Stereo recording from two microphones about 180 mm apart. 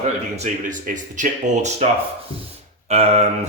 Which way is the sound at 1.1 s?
40° right (ahead or behind).